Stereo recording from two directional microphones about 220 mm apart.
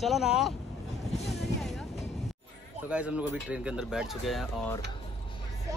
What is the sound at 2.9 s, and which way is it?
Speech, 5° right (ahead or behind).